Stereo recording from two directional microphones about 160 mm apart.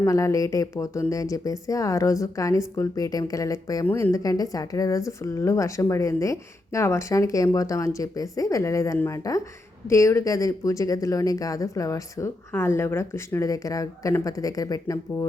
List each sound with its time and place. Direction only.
0.0 s speech: 20° left (ahead or behind)